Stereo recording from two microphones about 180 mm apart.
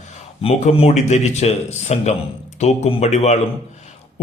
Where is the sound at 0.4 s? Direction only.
35° left (ahead or behind).